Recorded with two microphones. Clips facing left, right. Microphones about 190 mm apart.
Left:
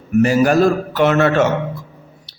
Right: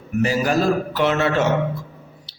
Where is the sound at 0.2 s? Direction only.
55° left (ahead or behind).